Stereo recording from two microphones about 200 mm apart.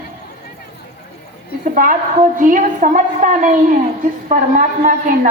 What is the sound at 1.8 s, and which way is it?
A woman's voice, 45° right (ahead or behind).